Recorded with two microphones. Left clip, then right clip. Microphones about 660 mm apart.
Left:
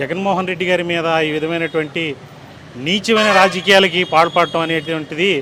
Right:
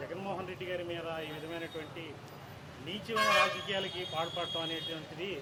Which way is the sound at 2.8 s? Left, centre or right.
Left.